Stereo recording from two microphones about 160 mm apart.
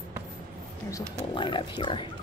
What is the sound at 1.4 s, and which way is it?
Speech, 30° left (ahead or behind).